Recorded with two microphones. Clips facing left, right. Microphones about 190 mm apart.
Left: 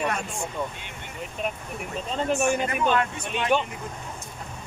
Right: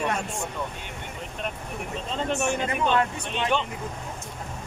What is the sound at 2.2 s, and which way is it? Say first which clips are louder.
Speech: left 3 dB; 10° left (ahead or behind).